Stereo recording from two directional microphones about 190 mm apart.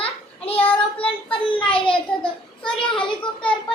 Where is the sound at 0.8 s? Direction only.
30° left (ahead or behind).